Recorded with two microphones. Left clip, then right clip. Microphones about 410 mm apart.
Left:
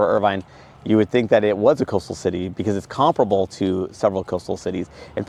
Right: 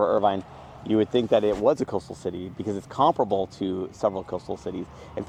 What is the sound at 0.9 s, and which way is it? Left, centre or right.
Speech, left.